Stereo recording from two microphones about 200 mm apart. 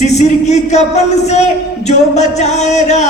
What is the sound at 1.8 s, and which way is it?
A man's voice, 35° left (ahead or behind).